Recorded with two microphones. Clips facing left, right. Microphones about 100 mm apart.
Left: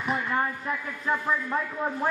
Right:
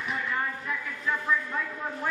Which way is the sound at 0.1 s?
35° left (ahead or behind).